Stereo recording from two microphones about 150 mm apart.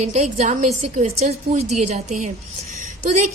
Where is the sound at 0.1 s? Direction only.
50° right (ahead or behind).